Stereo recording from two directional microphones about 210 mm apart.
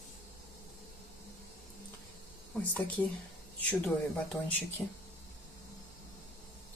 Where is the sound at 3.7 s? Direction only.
5° left (ahead or behind).